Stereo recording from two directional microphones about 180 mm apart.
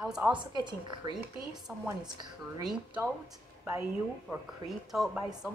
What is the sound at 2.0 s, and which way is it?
Speech, 25° right (ahead or behind).